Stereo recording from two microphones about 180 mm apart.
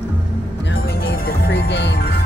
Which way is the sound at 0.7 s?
60° left (ahead or behind).